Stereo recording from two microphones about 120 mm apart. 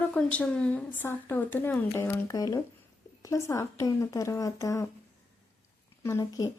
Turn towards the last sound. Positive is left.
turn(degrees=25)  # may be behind; listen again after turning